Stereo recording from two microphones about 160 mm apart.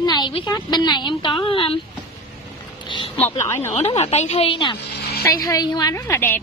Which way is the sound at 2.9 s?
35° left (ahead or behind).